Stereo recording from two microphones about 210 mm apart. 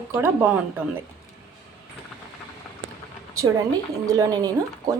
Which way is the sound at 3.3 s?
15° right (ahead or behind).